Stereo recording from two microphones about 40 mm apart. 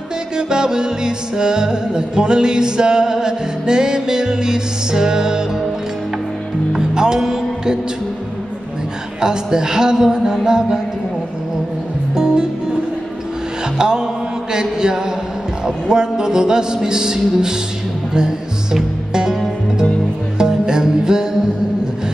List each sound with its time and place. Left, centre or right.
0.4 s music: centre
6.7 s music: centre
9.2 s music: centre
12.1 s music: centre
13.7 s music: centre
20.3 s music: centre